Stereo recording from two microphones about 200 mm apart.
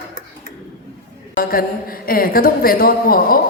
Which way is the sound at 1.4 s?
45° left (ahead or behind).